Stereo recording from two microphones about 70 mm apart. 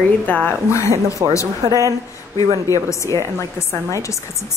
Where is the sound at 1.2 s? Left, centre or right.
Right.